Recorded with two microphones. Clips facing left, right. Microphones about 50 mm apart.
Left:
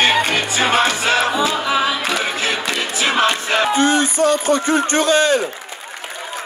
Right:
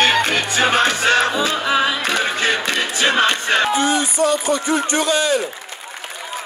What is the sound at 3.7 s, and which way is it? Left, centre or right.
A man's voice, left.